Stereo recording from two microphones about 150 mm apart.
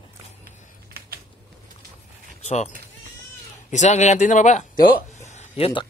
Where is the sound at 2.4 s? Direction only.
50° left (ahead or behind); by 5.0 s 70° left (ahead or behind).